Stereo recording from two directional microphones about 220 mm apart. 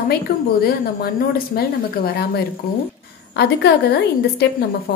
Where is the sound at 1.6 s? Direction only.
40° left (ahead or behind).